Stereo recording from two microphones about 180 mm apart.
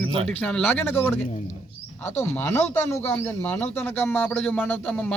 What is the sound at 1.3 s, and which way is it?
Speech, 40° left (ahead or behind).